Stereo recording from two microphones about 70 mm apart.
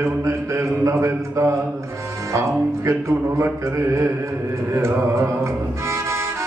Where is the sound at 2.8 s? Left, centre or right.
Right.